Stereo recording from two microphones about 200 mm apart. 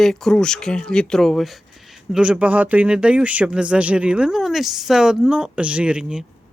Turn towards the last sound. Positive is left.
turn(degrees=-5)  # may be behind; listen again after turning